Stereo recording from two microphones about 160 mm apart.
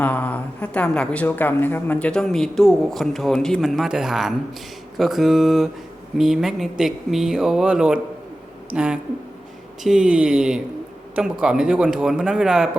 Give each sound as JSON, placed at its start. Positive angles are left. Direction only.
{"t": 0.0, "sound": "speech", "side_deg": 10}